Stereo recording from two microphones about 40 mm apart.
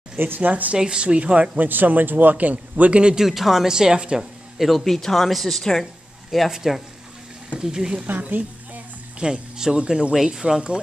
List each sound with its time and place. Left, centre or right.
0.1 s speech: right
0.4 s a man's voice: right
0.7 s speech: right
1.6 s a man's voice: right
3.2 s speech: centre
3.6 s speech: centre
4.2 s speech: centre
6.5 s speech: centre
8.1 s a woman's voice: right
9.2 s speech: centre